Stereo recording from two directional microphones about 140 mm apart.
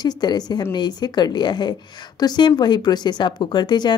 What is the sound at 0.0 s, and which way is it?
A woman's voice, 30° left (ahead or behind).